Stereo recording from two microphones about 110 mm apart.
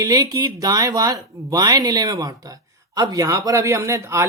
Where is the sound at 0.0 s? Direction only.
35° right (ahead or behind).